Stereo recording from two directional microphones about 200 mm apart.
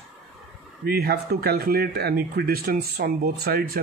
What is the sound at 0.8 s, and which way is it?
Speech, 50° right (ahead or behind).